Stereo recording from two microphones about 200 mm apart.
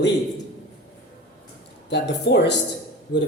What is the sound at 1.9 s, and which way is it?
Speech, 60° left (ahead or behind).